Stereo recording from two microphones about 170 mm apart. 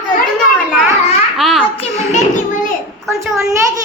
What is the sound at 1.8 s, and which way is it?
Speech, 45° left (ahead or behind).